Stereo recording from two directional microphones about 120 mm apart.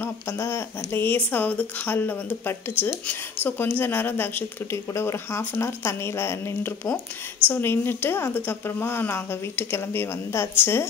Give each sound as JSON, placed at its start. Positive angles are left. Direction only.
{"t": 0.0, "sound": "a woman's voice", "side_deg": 20}